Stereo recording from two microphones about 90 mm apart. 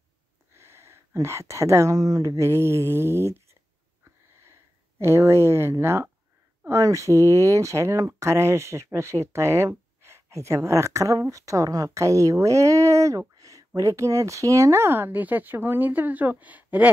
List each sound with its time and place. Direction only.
0.6 s speech: 30° right (ahead or behind)
4.0 s a sound: 30° right (ahead or behind)
6.6 s speech: 35° right (ahead or behind); by 16.9 s 15° right (ahead or behind)